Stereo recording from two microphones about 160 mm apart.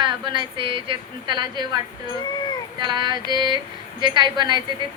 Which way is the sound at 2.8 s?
30° right (ahead or behind).